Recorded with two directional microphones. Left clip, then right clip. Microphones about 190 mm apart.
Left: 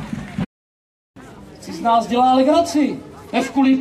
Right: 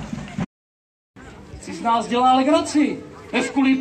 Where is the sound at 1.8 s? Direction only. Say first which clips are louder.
Left 3 dB; 55° left (ahead or behind).